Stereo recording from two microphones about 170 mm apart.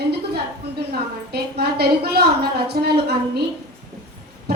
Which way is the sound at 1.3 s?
70° right (ahead or behind).